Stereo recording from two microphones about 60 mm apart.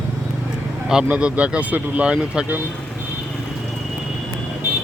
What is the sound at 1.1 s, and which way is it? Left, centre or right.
Speech, right.